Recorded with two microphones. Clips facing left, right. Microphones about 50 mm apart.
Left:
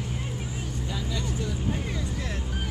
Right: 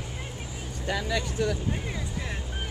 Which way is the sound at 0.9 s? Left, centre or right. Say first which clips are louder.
Right 6 dB; right.